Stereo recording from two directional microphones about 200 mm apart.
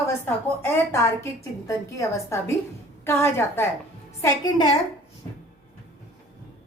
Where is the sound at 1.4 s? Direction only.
15° left (ahead or behind).